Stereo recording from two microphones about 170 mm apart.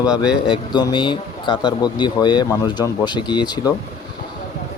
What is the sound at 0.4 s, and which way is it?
Speech, 25° left (ahead or behind).